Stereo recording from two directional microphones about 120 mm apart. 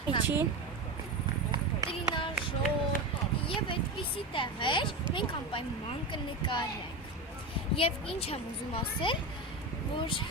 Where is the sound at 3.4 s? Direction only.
45° left (ahead or behind).